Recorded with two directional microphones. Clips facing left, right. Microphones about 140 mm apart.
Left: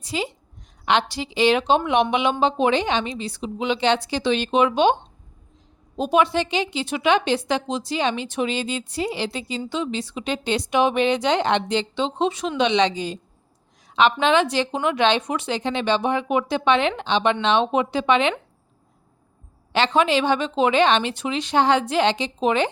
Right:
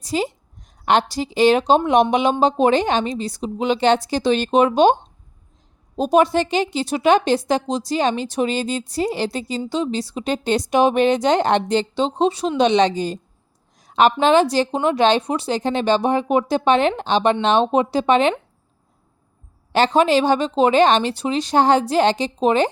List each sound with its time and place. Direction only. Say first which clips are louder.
0.0 s a woman's voice: right 5 dB; 40° right (ahead or behind)
6.0 s speech: right 4 dB; 40° right (ahead or behind)
19.7 s speech: right 4 dB; 40° right (ahead or behind)